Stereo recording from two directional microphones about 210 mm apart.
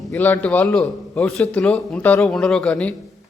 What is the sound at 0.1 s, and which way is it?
A man's voice, 10° left (ahead or behind).